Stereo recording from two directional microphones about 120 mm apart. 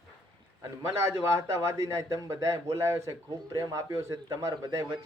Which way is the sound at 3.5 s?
25° right (ahead or behind).